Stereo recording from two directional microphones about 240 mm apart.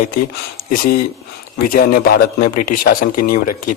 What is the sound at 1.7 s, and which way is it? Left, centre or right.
Speech, left.